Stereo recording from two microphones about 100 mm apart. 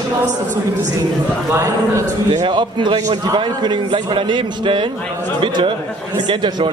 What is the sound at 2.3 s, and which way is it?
A man's voice, 50° right (ahead or behind).